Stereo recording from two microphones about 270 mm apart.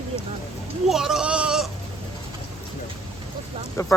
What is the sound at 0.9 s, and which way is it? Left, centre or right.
Speech, centre.